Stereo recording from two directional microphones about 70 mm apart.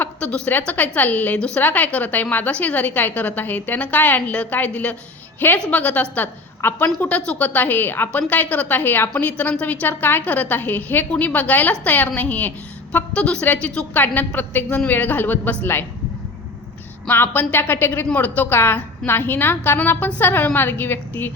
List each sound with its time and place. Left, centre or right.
0.0 s a woman's voice: centre
7.2 s a woman's voice: centre
17.1 s a woman's voice: left